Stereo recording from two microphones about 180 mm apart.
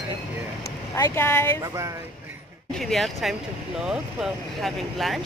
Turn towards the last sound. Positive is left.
turn(degrees=0)  # may be behind; listen again after turning